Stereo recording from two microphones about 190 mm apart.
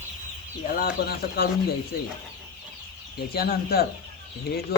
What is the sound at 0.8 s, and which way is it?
Speech, 50° left (ahead or behind).